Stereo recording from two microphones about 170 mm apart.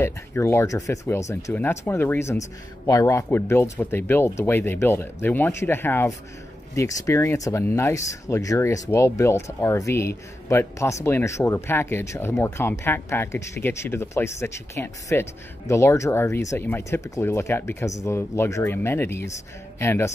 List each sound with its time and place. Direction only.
0.0 s speech: 15° left (ahead or behind)